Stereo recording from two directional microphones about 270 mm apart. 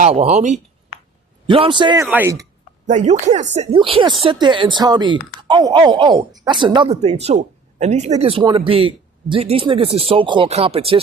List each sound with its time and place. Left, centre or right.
0.0 s speech: right
2.8 s speech: right